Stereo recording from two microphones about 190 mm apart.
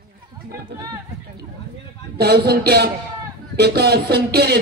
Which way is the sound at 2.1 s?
55° right (ahead or behind).